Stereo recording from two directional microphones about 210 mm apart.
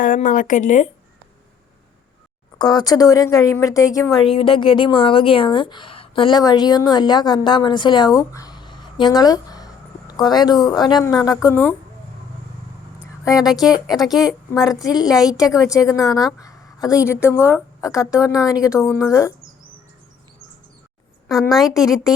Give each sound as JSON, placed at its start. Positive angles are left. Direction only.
{"t": 0.0, "sound": "speech", "side_deg": 40}
{"t": 2.6, "sound": "a woman's voice", "side_deg": 20}
{"t": 13.2, "sound": "speech", "side_deg": 0}
{"t": 15.5, "sound": "speech", "side_deg": 15}
{"t": 16.0, "sound": "speech", "side_deg": 0}
{"t": 16.4, "sound": "a woman's voice", "side_deg": 15}
{"t": 21.4, "sound": "speech", "side_deg": 0}